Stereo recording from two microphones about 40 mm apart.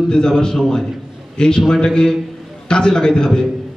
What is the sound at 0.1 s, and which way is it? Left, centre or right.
Speech, centre.